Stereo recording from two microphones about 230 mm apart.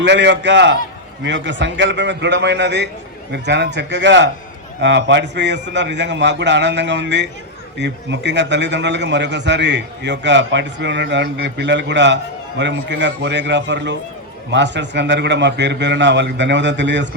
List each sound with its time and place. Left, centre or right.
0.0 s a man's voice: right